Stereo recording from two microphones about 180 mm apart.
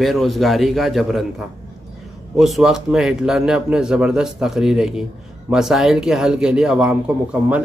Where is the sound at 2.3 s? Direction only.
Centre (ahead or behind).